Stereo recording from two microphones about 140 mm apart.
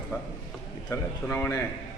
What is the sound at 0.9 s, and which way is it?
Speech, 15° left (ahead or behind).